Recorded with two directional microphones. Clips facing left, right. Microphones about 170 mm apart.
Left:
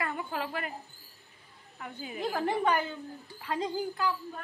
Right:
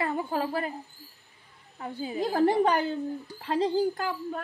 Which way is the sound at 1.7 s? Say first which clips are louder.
Right 7 dB; 30° right (ahead or behind).